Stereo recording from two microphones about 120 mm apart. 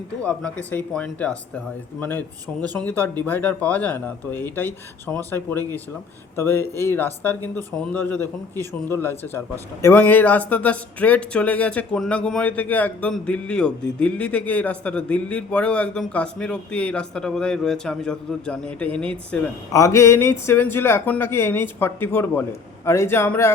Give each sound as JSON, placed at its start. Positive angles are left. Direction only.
{"t": 0.2, "sound": "speech", "side_deg": 10}
{"t": 19.7, "sound": "speech", "side_deg": 25}